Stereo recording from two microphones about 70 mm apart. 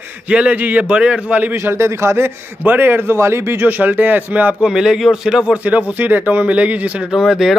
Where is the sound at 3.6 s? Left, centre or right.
Right.